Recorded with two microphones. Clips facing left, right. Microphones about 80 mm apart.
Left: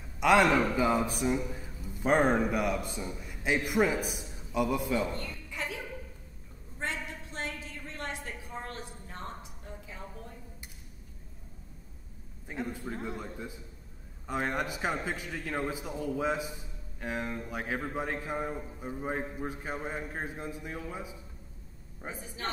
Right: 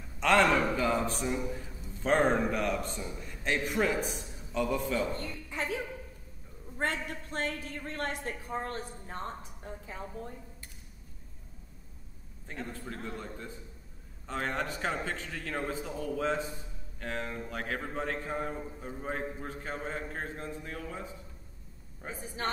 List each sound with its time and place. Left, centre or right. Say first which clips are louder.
0.2 s a man's voice: left 1 dB; centre
5.1 s a sound: right 2 dB; right
7.1 s a woman's voice: right 4 dB; right
12.4 s a man's voice: left 4 dB; centre